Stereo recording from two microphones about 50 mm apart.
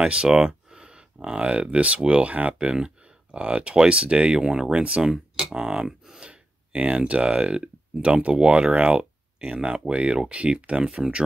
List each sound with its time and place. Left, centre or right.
0.0 s speech: centre